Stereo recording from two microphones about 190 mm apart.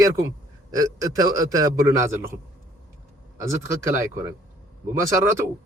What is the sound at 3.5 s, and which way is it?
A man's voice, 15° right (ahead or behind).